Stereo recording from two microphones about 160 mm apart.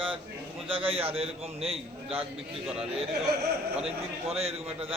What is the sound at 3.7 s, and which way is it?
Speech, 40° right (ahead or behind).